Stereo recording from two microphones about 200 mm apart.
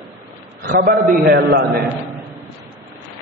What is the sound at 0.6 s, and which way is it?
A man's voice, 50° right (ahead or behind).